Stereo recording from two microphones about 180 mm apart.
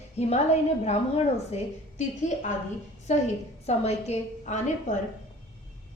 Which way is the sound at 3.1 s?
40° left (ahead or behind).